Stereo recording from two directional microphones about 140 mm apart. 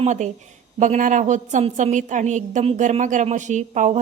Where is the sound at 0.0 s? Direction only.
60° right (ahead or behind).